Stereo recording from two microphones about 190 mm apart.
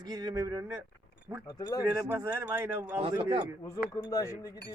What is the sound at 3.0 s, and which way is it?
Speech, 30° right (ahead or behind).